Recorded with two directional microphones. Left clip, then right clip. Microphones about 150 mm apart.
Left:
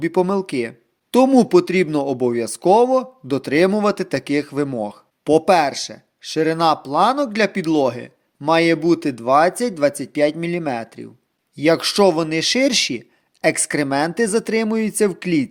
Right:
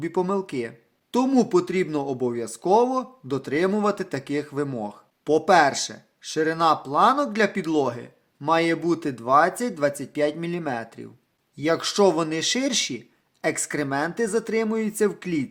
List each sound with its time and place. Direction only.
0.0 s speech: 35° left (ahead or behind)
11.5 s speech: 40° left (ahead or behind)